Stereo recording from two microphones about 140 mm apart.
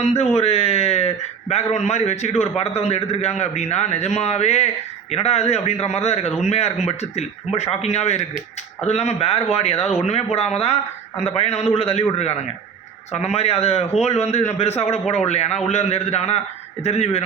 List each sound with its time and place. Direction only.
0.0 s a man's voice: 50° left (ahead or behind)
0.3 s a sound: 45° left (ahead or behind)
1.7 s a man's voice: 55° left (ahead or behind)